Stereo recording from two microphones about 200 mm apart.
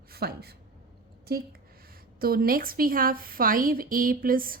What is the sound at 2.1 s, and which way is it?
A woman's voice, 50° right (ahead or behind).